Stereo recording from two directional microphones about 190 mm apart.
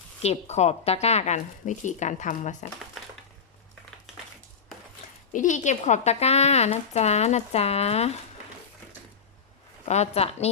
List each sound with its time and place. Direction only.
0.2 s a woman's voice: 35° left (ahead or behind)
5.3 s a woman's voice: 40° left (ahead or behind)
9.9 s a woman's voice: 35° left (ahead or behind)